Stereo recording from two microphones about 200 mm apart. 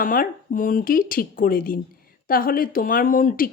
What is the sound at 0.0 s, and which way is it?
Speech, 45° left (ahead or behind).